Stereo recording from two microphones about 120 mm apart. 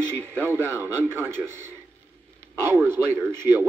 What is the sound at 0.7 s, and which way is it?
Speech, 20° right (ahead or behind).